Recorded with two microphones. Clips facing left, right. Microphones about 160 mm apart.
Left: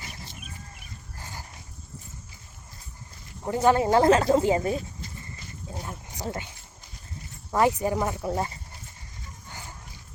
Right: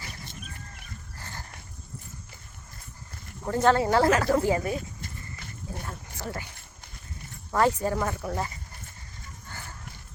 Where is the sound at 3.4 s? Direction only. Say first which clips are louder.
Left 1 dB; 15° left (ahead or behind).